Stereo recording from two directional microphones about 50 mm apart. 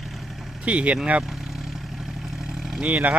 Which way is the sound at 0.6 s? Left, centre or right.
Right.